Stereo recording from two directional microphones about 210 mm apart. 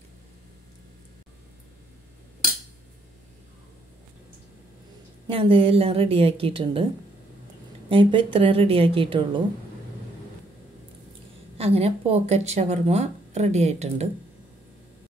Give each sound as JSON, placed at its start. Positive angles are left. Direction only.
{"t": 5.3, "sound": "a woman's voice", "side_deg": -25}
{"t": 7.9, "sound": "a woman's voice", "side_deg": -25}
{"t": 11.5, "sound": "speech", "side_deg": -30}